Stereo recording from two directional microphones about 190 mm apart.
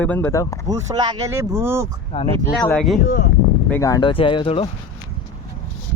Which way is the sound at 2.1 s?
30° left (ahead or behind).